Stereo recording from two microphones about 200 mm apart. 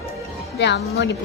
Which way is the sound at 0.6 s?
60° left (ahead or behind).